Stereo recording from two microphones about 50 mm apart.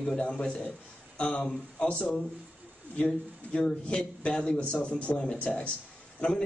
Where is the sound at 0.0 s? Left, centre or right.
Centre.